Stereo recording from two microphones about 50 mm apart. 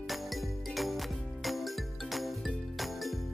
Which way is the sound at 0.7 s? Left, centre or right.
Centre.